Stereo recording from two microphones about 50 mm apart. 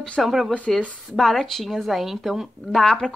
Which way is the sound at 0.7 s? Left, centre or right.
Centre.